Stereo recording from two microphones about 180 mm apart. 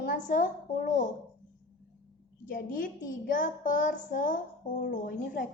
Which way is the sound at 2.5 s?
50° left (ahead or behind).